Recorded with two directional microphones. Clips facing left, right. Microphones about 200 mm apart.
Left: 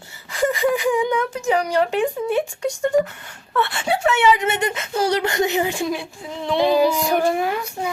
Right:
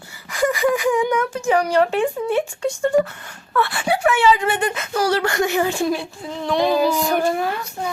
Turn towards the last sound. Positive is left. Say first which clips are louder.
# left 1 dB
turn(degrees=15)  # may be behind; listen again after turning